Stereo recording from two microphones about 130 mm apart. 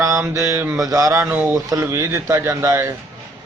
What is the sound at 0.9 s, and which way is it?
Speech, 25° right (ahead or behind).